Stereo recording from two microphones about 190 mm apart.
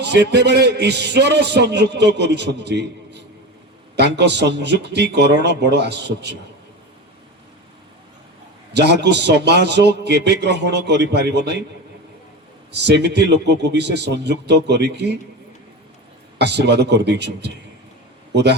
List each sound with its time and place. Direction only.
0.0 s a man's voice: 65° right (ahead or behind)
8.7 s a man's voice: 60° right (ahead or behind)
12.7 s a man's voice: 65° right (ahead or behind)
16.4 s a man's voice: 60° right (ahead or behind)